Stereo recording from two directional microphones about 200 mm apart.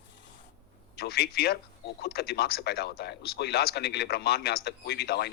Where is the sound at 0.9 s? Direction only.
50° left (ahead or behind).